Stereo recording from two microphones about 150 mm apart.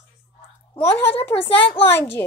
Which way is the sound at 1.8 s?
15° left (ahead or behind).